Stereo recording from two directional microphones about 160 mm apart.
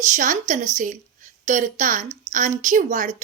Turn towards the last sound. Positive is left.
turn(degrees=-50)  # may be behind; listen again after turning